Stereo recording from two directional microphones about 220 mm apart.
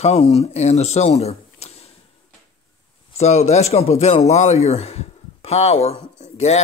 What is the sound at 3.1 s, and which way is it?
Speech, 30° left (ahead or behind).